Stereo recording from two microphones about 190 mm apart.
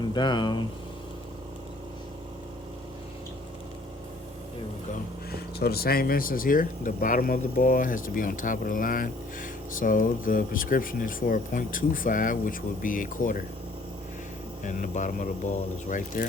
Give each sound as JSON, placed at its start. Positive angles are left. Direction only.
{"t": 0.0, "sound": "speech", "side_deg": 25}
{"t": 5.3, "sound": "speech", "side_deg": 55}
{"t": 14.6, "sound": "speech", "side_deg": 40}